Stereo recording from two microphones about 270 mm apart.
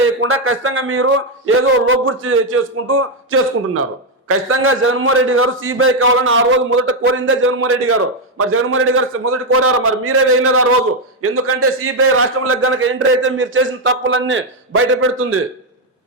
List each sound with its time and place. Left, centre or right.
0.2 s a man's voice: right